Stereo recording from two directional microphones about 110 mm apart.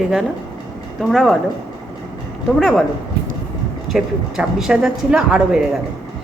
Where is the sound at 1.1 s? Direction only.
Centre (ahead or behind).